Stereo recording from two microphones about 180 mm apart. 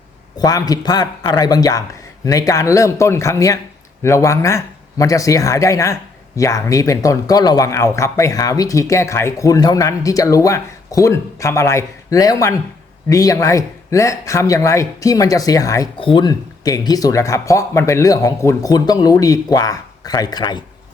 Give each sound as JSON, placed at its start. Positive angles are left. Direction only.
{"t": 0.3, "sound": "speech", "side_deg": 20}